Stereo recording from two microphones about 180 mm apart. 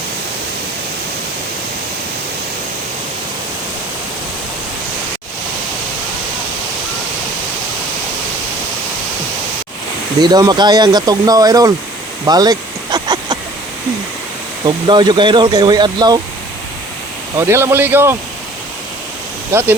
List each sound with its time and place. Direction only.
10.2 s speech: 20° right (ahead or behind)
12.2 s a sound: 20° right (ahead or behind)
14.8 s speech: 25° right (ahead or behind)
17.3 s speech: 15° right (ahead or behind)
19.5 s speech: 15° right (ahead or behind)